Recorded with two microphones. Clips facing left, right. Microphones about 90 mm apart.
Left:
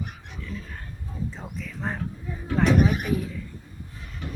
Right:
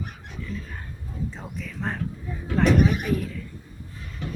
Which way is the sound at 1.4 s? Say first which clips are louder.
Right 1 dB; centre (ahead or behind).